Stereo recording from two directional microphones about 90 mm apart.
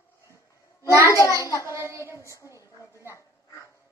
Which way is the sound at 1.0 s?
35° left (ahead or behind).